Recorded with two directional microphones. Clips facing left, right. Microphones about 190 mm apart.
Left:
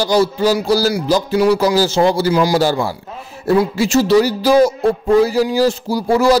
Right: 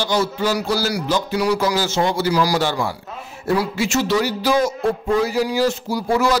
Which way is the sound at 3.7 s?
35° left (ahead or behind).